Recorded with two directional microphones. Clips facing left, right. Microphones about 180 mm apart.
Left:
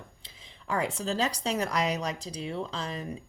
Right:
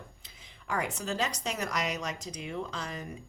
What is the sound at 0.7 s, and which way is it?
Speech, 30° left (ahead or behind).